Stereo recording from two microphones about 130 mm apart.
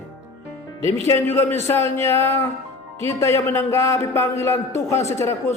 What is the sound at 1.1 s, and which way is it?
Speech, 20° left (ahead or behind).